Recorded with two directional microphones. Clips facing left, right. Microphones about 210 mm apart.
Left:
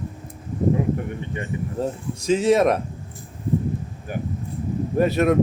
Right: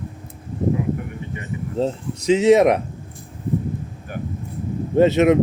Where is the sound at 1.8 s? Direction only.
20° right (ahead or behind).